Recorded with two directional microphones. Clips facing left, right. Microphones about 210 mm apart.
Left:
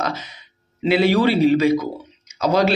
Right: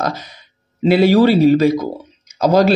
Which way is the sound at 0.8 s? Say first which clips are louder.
Right 5 dB; 40° right (ahead or behind).